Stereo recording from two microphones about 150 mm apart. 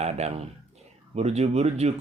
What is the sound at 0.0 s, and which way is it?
Speech, 45° right (ahead or behind).